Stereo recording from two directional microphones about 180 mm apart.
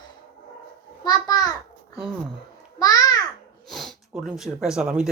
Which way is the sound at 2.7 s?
20° left (ahead or behind).